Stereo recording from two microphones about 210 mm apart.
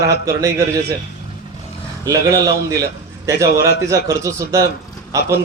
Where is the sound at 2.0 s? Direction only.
15° right (ahead or behind).